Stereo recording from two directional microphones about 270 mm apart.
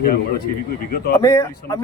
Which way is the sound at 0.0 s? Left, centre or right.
Left.